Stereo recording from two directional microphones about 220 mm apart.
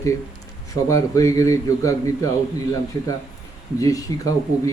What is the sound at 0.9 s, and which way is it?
Speech, 15° left (ahead or behind).